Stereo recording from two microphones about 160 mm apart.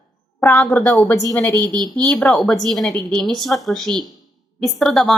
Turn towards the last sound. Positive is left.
turn(degrees=0)  # may be behind; listen again after turning